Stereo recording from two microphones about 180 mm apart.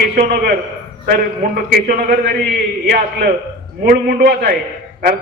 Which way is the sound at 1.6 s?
55° right (ahead or behind).